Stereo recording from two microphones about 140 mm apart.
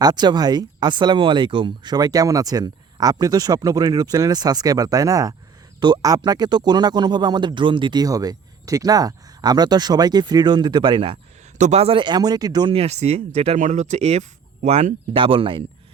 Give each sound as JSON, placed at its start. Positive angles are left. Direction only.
{"t": 0.0, "sound": "speech", "side_deg": -30}
{"t": 11.5, "sound": "speech", "side_deg": -55}
{"t": 12.7, "sound": "speech", "side_deg": -45}